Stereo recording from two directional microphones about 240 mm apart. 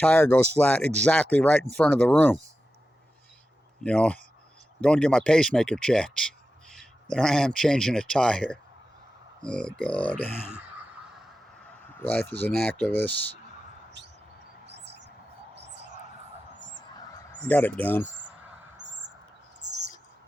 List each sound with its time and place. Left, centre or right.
0.0 s speech: centre
3.8 s speech: centre
10.6 s a sound: centre
11.9 s speech: centre
16.6 s honk: right
17.4 s speech: centre